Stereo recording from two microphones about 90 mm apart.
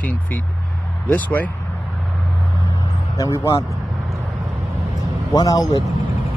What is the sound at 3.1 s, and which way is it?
Speech, 35° left (ahead or behind).